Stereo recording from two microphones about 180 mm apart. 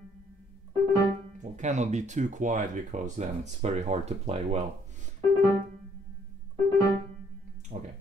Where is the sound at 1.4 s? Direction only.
40° right (ahead or behind).